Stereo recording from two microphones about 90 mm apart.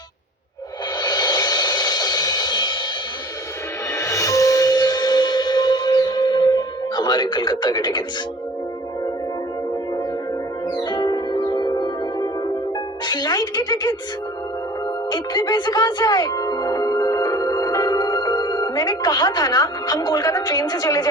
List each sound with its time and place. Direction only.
1.0 s music: 50° left (ahead or behind)
3.9 s music: 35° left (ahead or behind); by 8.0 s 55° left (ahead or behind)
10.8 s music: 50° left (ahead or behind)
15.1 s speech: 50° left (ahead or behind)